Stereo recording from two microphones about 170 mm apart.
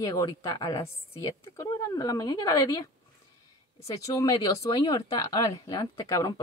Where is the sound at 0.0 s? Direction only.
20° left (ahead or behind).